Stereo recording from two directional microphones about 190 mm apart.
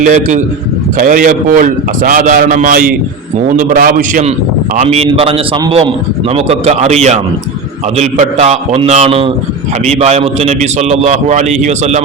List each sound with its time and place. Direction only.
0.0 s a man's voice: 40° right (ahead or behind)